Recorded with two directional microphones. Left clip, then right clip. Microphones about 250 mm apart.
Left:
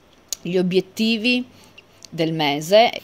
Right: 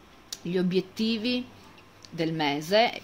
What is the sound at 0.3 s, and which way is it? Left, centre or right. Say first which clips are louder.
A woman's voice: left 8 dB; left.